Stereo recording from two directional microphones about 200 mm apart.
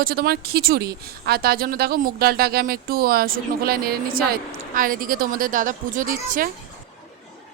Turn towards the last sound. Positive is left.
turn(degrees=-45)  # may be behind; listen again after turning